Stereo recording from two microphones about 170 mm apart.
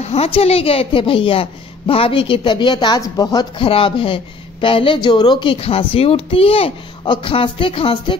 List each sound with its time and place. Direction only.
0.0 s a woman's voice: 35° left (ahead or behind)